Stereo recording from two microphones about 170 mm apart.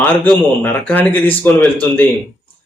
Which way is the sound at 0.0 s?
10° left (ahead or behind).